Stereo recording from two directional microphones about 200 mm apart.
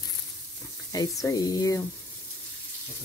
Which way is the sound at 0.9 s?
20° left (ahead or behind).